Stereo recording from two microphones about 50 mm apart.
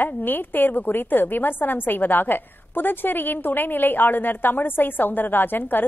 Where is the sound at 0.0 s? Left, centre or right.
Left.